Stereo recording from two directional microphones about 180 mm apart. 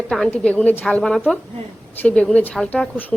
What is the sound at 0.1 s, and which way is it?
A woman's voice, 5° left (ahead or behind).